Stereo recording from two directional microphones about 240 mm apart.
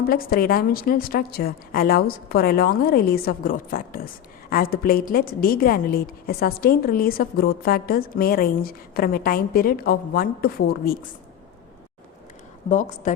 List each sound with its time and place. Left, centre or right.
0.1 s a woman's voice: left
12.6 s a woman's voice: left